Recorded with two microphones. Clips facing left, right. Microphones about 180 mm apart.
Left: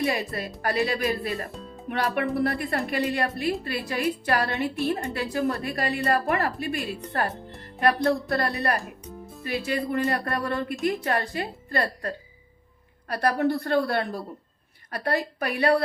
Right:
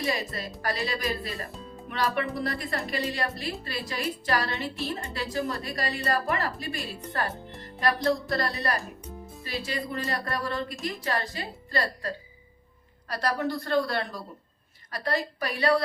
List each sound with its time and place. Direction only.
0.0 s a woman's voice: 55° left (ahead or behind)
7.8 s a woman's voice: 60° left (ahead or behind)